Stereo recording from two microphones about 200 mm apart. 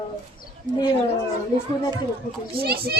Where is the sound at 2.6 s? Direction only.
50° right (ahead or behind).